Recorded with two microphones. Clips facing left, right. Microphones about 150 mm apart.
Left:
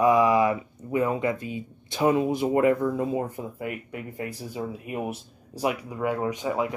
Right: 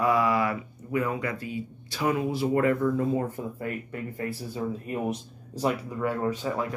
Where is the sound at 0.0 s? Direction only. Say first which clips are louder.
Left 4 dB; 20° left (ahead or behind).